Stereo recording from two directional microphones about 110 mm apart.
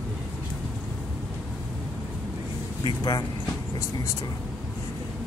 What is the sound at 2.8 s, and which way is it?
Speech, 40° left (ahead or behind).